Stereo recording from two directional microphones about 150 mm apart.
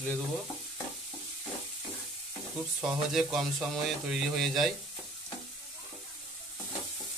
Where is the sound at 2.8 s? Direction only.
5° right (ahead or behind).